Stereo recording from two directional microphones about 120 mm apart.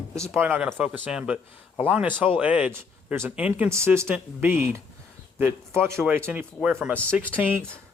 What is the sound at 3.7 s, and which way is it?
Speech, 25° right (ahead or behind).